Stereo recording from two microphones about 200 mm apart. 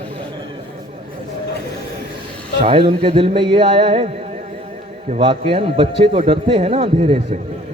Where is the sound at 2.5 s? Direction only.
25° right (ahead or behind).